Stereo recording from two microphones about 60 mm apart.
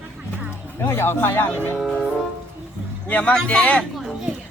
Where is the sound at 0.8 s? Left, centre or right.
Left.